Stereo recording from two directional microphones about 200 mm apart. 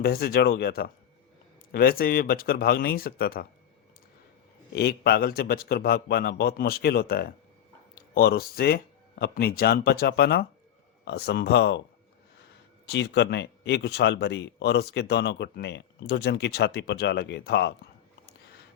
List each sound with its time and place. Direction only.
0.0 s a man's voice: 50° left (ahead or behind)
4.7 s a man's voice: 55° left (ahead or behind)
12.9 s a man's voice: 60° left (ahead or behind)